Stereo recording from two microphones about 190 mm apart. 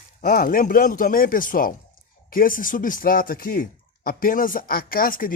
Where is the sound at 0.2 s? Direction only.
45° left (ahead or behind).